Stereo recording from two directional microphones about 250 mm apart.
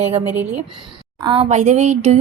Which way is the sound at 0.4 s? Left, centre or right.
Right.